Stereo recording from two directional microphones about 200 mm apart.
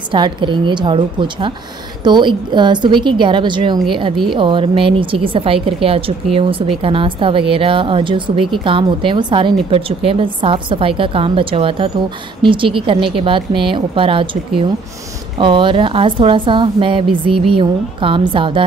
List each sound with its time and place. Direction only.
0.1 s a woman's voice: 25° right (ahead or behind)